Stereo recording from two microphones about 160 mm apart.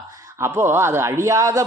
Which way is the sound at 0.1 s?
20° right (ahead or behind).